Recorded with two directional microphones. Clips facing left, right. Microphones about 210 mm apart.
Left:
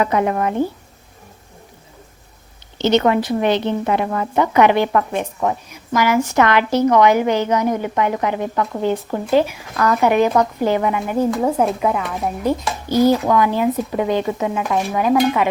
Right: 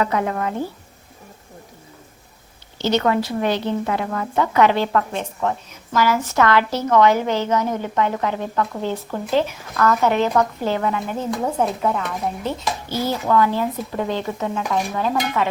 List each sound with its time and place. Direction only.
0.0 s speech: 20° left (ahead or behind)
2.7 s speech: 20° left (ahead or behind)